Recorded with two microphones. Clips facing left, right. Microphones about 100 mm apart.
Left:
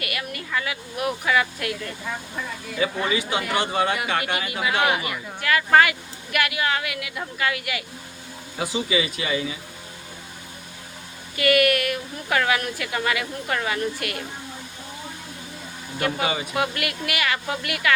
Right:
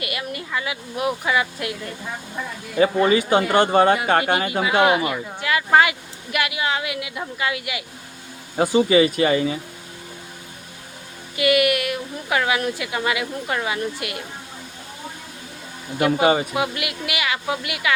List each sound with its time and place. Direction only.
0.0 s speech: 25° right (ahead or behind)
2.7 s speech: 40° right (ahead or behind)
3.9 s speech: 35° right (ahead or behind)
4.7 s speech: 20° right (ahead or behind)
8.5 s speech: 45° right (ahead or behind)
11.3 s speech: 15° right (ahead or behind)
16.0 s speech: 15° right (ahead or behind)
16.2 s speech: 40° right (ahead or behind)
16.6 s speech: 15° right (ahead or behind)